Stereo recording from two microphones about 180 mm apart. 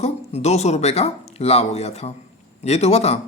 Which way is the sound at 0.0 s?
35° left (ahead or behind).